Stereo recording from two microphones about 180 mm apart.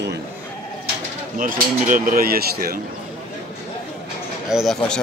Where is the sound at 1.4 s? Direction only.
50° right (ahead or behind).